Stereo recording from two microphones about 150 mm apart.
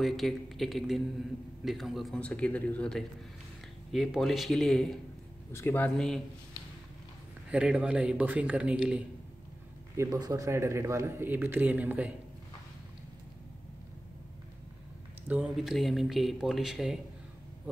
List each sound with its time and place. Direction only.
0.0 s speech: centre (ahead or behind)
5.5 s speech: 15° left (ahead or behind)
5.9 s speech: centre (ahead or behind)
7.5 s speech: 5° right (ahead or behind)
9.9 s speech: 25° right (ahead or behind)
15.2 s speech: 10° right (ahead or behind)